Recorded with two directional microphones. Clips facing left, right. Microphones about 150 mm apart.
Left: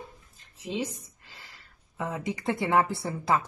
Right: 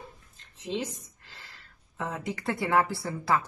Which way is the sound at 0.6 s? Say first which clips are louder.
Even; 10° left (ahead or behind).